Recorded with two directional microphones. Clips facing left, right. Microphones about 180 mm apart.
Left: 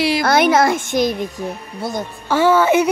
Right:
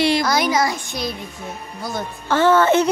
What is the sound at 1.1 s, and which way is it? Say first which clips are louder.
Speech: left 7 dB; 40° left (ahead or behind).